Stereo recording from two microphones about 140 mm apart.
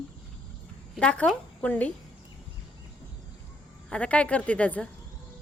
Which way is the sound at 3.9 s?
10° left (ahead or behind).